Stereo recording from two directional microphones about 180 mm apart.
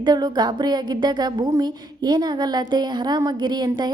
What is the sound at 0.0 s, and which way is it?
Speech, 25° right (ahead or behind).